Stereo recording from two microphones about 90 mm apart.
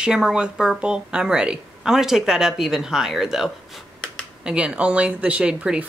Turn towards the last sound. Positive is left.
turn(degrees=-10)  # may be behind; listen again after turning